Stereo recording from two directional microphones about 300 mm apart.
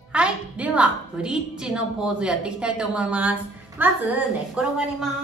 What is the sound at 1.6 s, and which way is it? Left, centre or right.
A woman's voice, centre.